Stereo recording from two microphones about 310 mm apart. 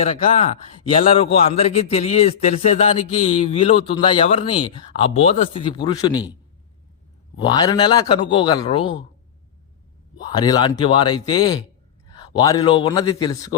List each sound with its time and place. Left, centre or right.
0.0 s a man's voice: centre
7.4 s a man's voice: centre
10.2 s a man's voice: centre